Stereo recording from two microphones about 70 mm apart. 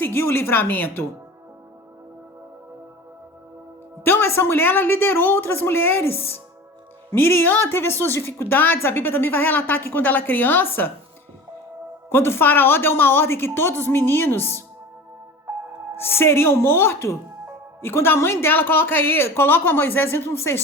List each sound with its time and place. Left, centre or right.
0.0 s a woman's voice: left
4.0 s a woman's voice: left
12.0 s a woman's voice: left
16.0 s a woman's voice: left